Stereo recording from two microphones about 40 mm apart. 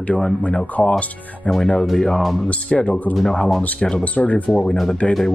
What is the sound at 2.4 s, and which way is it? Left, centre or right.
Speech, left.